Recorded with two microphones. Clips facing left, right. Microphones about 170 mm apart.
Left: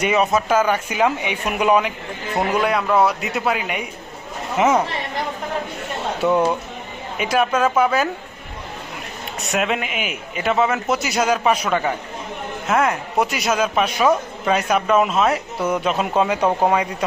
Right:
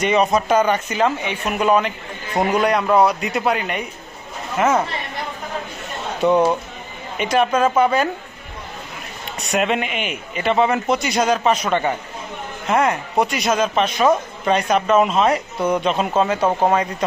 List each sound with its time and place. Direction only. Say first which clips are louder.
0.0 s a man's voice: right 1 dB; 5° left (ahead or behind)
7.2 s a man's voice: right 1 dB; 5° left (ahead or behind)
9.5 s a man's voice: right 2 dB; centre (ahead or behind)